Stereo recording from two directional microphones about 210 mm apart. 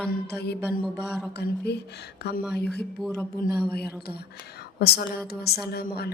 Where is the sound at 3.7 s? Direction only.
50° left (ahead or behind).